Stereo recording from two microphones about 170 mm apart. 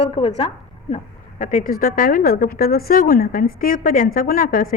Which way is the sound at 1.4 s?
50° left (ahead or behind).